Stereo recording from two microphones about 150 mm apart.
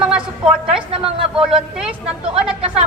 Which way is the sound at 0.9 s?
35° right (ahead or behind).